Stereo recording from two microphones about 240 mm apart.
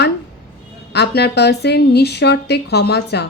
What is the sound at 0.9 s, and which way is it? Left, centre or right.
A woman's voice, left.